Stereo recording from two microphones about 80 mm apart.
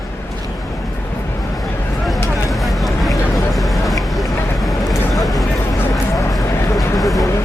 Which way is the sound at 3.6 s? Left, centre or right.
Centre.